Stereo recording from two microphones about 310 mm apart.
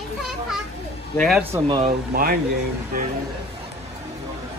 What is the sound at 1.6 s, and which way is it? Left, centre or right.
Speech, centre.